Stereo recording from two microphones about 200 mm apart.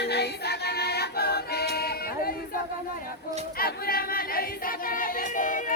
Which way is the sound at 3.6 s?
50° left (ahead or behind).